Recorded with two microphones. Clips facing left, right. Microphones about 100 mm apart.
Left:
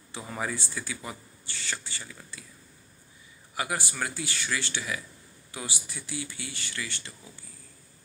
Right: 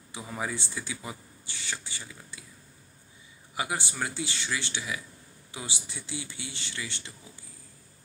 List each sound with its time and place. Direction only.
0.1 s speech: 10° right (ahead or behind)
3.5 s speech: 20° right (ahead or behind)